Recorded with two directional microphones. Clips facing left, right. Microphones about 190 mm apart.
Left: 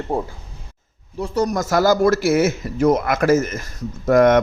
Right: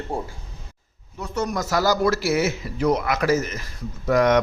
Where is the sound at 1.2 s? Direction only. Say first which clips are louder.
Left 6 dB; 30° left (ahead or behind).